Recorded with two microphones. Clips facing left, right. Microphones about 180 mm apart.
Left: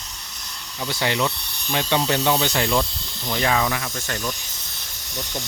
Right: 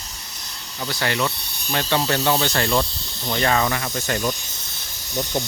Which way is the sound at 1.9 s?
15° left (ahead or behind).